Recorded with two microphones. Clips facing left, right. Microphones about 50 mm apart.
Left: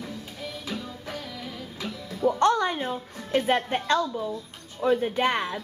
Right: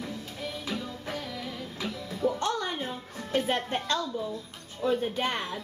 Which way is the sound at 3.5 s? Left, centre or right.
Left.